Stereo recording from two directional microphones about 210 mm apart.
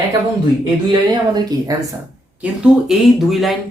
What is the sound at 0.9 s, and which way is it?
Speech, 20° right (ahead or behind).